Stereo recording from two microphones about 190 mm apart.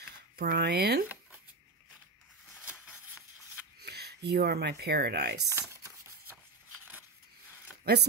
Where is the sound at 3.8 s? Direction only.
60° right (ahead or behind).